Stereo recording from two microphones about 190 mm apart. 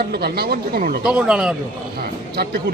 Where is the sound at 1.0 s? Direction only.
5° right (ahead or behind).